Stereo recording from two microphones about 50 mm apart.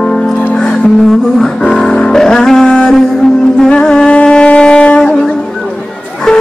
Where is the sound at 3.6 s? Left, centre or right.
Centre.